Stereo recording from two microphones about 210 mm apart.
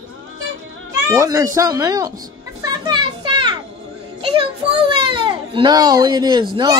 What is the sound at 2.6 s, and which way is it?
Children playing, 20° right (ahead or behind).